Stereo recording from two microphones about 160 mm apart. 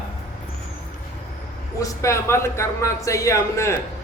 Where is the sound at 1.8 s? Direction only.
20° left (ahead or behind).